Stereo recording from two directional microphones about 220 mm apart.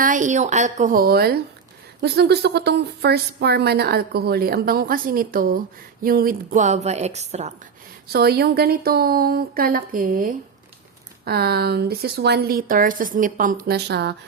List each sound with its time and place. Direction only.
0.0 s a woman's voice: 35° right (ahead or behind)
8.1 s a woman's voice: 45° right (ahead or behind)